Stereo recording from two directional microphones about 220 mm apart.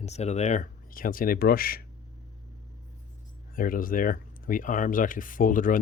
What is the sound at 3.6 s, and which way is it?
Speech, 40° left (ahead or behind).